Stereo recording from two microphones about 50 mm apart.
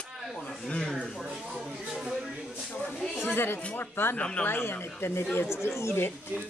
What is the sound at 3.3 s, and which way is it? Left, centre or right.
Speech, left.